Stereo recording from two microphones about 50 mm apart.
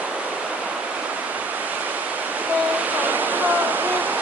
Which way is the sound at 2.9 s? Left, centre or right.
Right.